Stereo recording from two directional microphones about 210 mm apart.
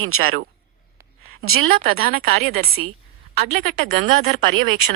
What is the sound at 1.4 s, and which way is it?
Speech, 45° right (ahead or behind).